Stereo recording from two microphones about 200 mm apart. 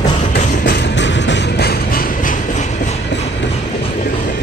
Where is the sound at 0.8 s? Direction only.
65° left (ahead or behind); by 2.9 s 35° left (ahead or behind).